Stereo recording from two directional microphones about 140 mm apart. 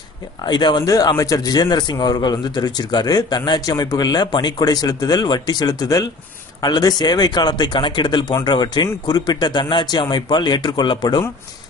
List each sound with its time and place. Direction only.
0.5 s a man's voice: 30° left (ahead or behind)